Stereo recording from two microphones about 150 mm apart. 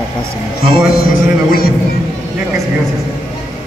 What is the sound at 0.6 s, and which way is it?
Music, 90° left.